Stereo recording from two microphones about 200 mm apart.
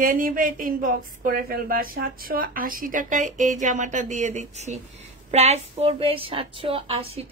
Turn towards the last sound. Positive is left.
turn(degrees=-30)  # may be behind; listen again after turning